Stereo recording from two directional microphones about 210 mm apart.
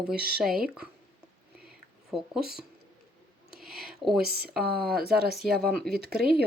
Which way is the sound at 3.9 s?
Centre (ahead or behind).